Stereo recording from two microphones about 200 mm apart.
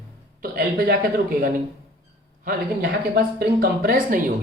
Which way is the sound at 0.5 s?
50° right (ahead or behind).